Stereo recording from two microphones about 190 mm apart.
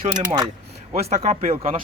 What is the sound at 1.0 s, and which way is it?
Speech, 35° right (ahead or behind).